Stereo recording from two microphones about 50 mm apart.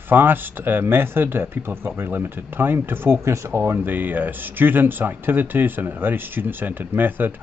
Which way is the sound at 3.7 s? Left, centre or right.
Right.